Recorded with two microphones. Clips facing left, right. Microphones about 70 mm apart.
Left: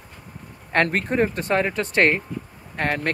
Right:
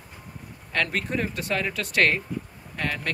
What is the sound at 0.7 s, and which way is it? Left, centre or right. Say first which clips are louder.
Speech: left 6 dB; left.